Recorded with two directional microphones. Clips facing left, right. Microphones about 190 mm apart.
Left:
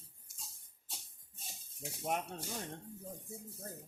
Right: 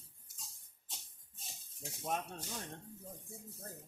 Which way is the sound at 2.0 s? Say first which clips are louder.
Left 2 dB; 15° left (ahead or behind).